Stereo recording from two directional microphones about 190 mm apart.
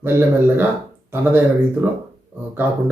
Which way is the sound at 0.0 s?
10° right (ahead or behind).